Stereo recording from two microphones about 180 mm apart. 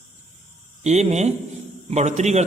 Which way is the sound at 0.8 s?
40° right (ahead or behind).